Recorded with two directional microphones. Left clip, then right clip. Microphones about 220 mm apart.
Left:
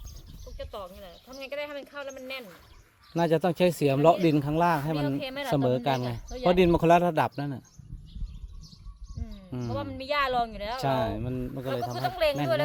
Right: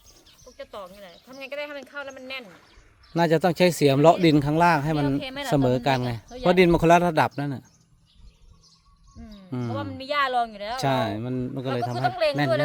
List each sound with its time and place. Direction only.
0.5 s speech: centre (ahead or behind)
3.1 s speech: 30° right (ahead or behind)
5.0 s speech: 5° right (ahead or behind)
5.5 s speech: 30° right (ahead or behind)
9.5 s a sound: 30° right (ahead or behind)
9.7 s speech: 5° right (ahead or behind)
10.8 s speech: 30° right (ahead or behind)
12.0 s speech: 5° right (ahead or behind)